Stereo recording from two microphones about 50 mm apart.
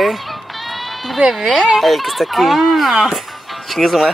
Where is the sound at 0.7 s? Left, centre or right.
Centre.